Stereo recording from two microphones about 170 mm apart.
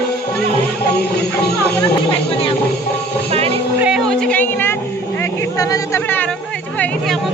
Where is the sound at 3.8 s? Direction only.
5° right (ahead or behind); by 4.8 s 15° left (ahead or behind).